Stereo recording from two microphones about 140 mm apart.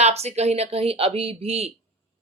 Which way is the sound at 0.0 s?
50° right (ahead or behind).